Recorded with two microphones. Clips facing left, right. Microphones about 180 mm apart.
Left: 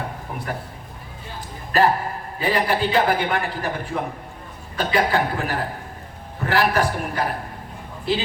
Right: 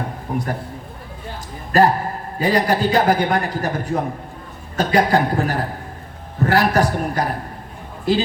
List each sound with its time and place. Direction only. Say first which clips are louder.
0.3 s a man's voice: right 9 dB; 40° right (ahead or behind)
1.7 s a man's voice: right 3 dB; 40° right (ahead or behind)